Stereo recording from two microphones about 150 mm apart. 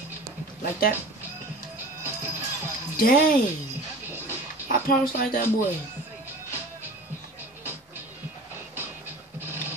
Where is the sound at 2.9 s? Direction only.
75° left (ahead or behind).